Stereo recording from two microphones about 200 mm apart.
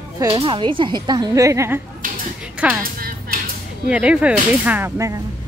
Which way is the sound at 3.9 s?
5° right (ahead or behind).